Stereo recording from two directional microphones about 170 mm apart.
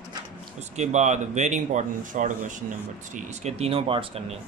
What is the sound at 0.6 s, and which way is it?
Speech, 45° right (ahead or behind).